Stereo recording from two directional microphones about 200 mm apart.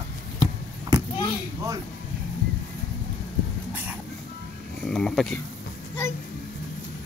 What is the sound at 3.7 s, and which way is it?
Music, 10° right (ahead or behind).